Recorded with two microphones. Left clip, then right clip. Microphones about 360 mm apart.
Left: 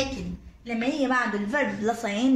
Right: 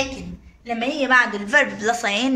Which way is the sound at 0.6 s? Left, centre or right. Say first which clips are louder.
Right 4 dB; right.